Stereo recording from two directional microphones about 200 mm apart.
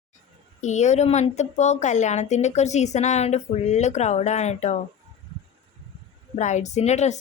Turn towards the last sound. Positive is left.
turn(degrees=35)  # may be behind; listen again after turning